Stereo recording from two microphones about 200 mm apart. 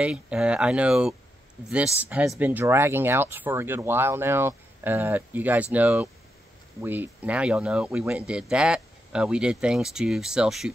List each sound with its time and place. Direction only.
0.0 s speech: 5° right (ahead or behind)